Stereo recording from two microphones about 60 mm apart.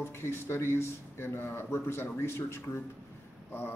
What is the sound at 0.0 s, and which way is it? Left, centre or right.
A man's voice, left.